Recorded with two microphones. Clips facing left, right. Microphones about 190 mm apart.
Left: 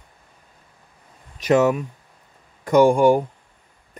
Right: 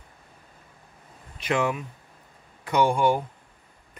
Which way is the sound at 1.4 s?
40° left (ahead or behind).